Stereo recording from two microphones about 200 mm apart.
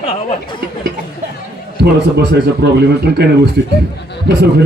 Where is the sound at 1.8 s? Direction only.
55° right (ahead or behind).